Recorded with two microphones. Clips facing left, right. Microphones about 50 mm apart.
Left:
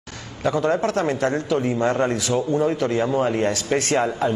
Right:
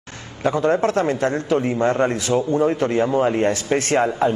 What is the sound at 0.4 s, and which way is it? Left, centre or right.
A man's voice, right.